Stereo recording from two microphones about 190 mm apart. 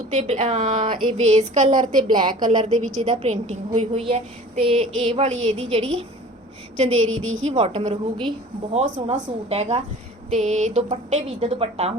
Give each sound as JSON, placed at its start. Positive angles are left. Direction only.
{"t": 0.2, "sound": "speech", "side_deg": -35}
{"t": 0.9, "sound": "a woman's voice", "side_deg": -30}
{"t": 7.1, "sound": "a woman's voice", "side_deg": -90}
{"t": 7.4, "sound": "speech", "side_deg": -35}